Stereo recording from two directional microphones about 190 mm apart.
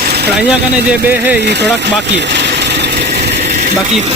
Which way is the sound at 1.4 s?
65° right (ahead or behind).